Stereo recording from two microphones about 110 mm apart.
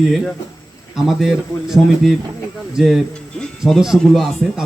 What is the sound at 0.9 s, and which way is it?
A man's voice, 5° right (ahead or behind).